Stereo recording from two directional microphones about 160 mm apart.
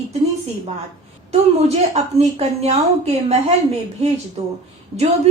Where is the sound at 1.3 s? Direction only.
40° right (ahead or behind).